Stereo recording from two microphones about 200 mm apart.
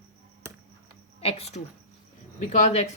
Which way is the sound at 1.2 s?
30° left (ahead or behind).